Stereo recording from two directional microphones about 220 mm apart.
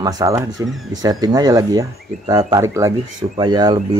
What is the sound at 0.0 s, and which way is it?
Speech, 15° right (ahead or behind).